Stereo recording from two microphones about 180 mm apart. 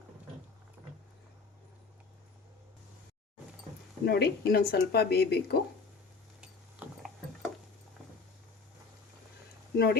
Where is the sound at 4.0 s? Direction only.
65° left (ahead or behind).